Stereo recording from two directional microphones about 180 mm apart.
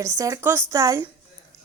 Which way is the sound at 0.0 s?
15° right (ahead or behind).